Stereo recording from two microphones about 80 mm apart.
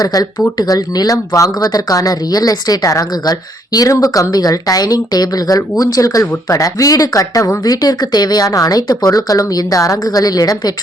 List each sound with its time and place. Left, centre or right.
0.0 s speech: left